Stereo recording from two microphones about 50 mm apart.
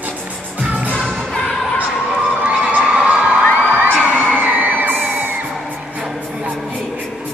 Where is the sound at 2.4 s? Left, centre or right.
Right.